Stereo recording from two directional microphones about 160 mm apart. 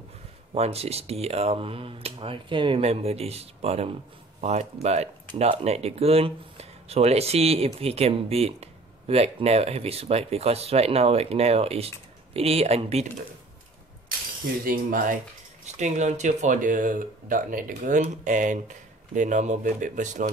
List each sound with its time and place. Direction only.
0.6 s speech: 40° right (ahead or behind)
14.6 s speech: 60° right (ahead or behind)
15.8 s speech: 45° right (ahead or behind)